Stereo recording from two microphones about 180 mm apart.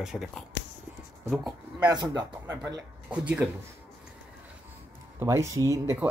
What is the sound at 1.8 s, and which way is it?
Speech, 25° right (ahead or behind).